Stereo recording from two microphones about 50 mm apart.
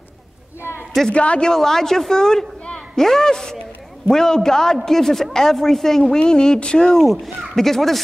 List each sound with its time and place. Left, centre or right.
1.1 s a woman's voice: left
1.5 s a man's voice: centre